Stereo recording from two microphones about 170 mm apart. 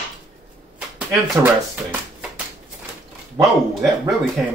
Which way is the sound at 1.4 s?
5° right (ahead or behind).